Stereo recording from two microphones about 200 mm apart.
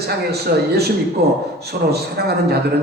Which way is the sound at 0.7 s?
50° right (ahead or behind).